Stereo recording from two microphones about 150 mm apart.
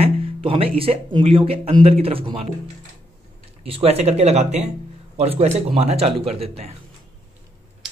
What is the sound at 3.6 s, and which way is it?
Speech, 40° right (ahead or behind).